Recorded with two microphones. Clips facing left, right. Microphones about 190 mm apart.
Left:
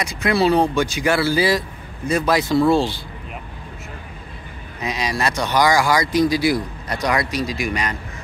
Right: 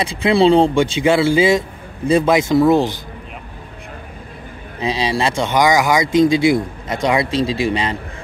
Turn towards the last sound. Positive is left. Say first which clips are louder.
# right 5 dB
turn(degrees=-30)  # may be behind; listen again after turning